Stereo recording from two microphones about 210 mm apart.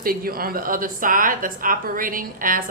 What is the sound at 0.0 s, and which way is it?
A woman's voice, 45° right (ahead or behind).